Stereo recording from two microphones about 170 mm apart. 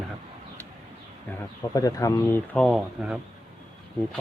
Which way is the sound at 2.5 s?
5° left (ahead or behind).